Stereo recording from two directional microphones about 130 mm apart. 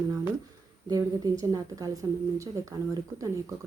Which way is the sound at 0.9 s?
30° right (ahead or behind).